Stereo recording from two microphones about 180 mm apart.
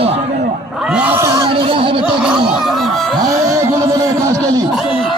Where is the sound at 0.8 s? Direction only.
5° right (ahead or behind).